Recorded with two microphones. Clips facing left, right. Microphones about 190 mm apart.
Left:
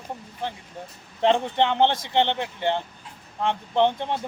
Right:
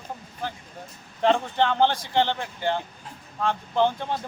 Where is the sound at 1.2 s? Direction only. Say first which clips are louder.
Left 1 dB; 25° left (ahead or behind).